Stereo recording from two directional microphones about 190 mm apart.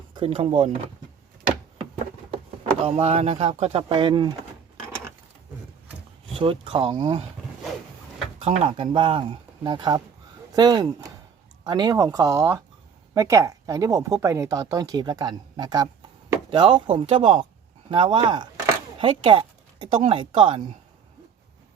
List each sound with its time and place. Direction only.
0.1 s speech: 25° right (ahead or behind)
2.8 s speech: 35° right (ahead or behind)
6.4 s speech: 25° right (ahead or behind)
8.4 s speech: 30° right (ahead or behind)